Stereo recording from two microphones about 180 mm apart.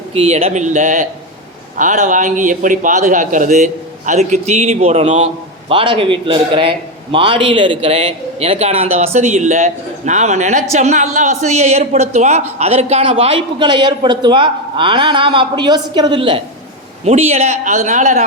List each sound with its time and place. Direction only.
0.1 s speech: 35° right (ahead or behind)